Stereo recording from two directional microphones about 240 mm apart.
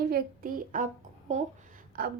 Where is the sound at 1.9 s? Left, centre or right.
Right.